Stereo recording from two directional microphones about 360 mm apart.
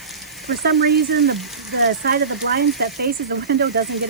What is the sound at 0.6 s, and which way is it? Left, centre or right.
Speech, right.